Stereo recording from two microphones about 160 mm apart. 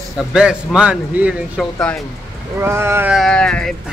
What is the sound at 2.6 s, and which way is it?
Speech, 15° right (ahead or behind).